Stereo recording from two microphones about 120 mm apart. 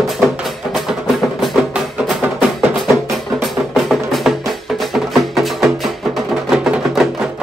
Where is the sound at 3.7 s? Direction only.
Centre (ahead or behind).